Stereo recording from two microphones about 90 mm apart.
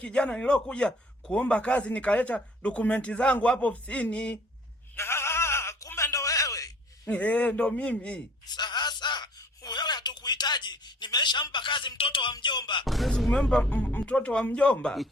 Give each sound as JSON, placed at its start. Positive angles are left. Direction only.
{"t": 0.0, "sound": "a man's voice", "side_deg": 10}
{"t": 4.9, "sound": "a sound", "side_deg": 30}
{"t": 7.1, "sound": "a man's voice", "side_deg": 15}
{"t": 8.4, "sound": "a sound", "side_deg": 55}
{"t": 11.5, "sound": "speech", "side_deg": 65}
{"t": 12.3, "sound": "speech", "side_deg": 55}
{"t": 12.8, "sound": "a man's voice", "side_deg": 0}